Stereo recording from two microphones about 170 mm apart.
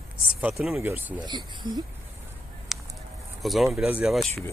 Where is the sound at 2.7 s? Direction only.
Centre (ahead or behind).